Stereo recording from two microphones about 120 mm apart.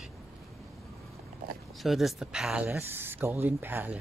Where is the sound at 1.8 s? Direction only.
Centre (ahead or behind).